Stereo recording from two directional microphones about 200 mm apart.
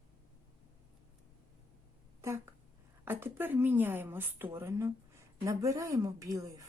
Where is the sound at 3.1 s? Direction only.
10° right (ahead or behind).